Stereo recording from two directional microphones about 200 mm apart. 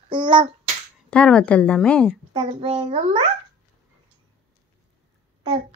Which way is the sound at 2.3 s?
30° right (ahead or behind).